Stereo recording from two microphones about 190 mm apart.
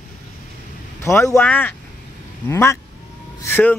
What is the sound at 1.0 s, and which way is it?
Speech, 15° left (ahead or behind).